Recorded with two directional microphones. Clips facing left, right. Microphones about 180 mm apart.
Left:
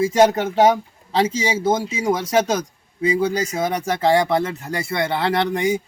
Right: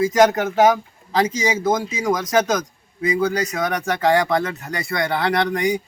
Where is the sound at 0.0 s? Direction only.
30° left (ahead or behind).